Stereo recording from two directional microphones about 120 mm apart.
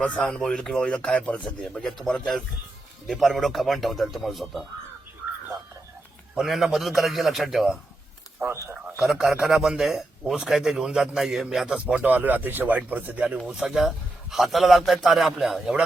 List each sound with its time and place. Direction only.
0.0 s a man's voice: 10° left (ahead or behind)
6.3 s a man's voice: centre (ahead or behind)
8.6 s a man's voice: 20° right (ahead or behind)
9.0 s a man's voice: 5° right (ahead or behind)